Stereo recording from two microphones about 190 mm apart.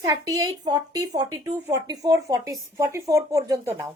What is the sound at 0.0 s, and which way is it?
A woman's voice, 15° right (ahead or behind).